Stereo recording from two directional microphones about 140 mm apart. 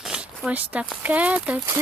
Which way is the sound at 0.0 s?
5° right (ahead or behind).